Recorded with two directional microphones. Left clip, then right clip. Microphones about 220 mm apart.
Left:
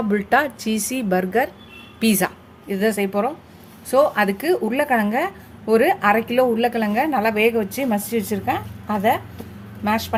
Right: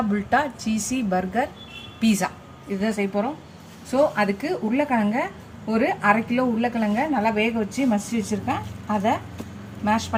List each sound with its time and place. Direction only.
0.1 s a woman's voice: 40° left (ahead or behind)